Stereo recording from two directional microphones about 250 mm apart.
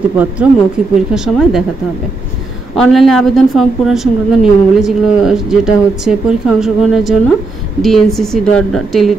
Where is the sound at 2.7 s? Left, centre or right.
Centre.